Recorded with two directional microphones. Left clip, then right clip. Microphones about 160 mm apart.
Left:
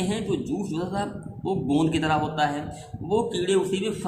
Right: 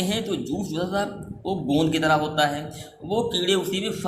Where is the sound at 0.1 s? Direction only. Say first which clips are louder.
Right 1 dB; 35° right (ahead or behind).